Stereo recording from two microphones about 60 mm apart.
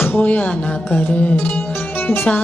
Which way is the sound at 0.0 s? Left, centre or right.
Left.